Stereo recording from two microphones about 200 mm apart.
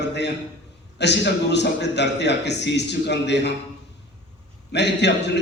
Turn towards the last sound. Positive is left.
turn(degrees=60)  # may be behind; listen again after turning